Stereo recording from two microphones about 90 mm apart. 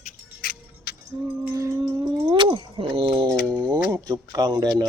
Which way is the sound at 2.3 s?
80° right.